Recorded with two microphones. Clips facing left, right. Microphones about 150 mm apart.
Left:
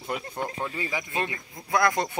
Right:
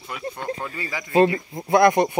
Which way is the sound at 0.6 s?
15° left (ahead or behind).